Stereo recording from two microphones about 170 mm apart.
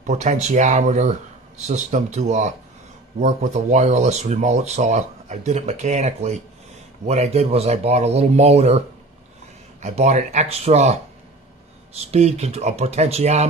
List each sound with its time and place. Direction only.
0.0 s speech: 45° right (ahead or behind)
12.0 s speech: 40° right (ahead or behind)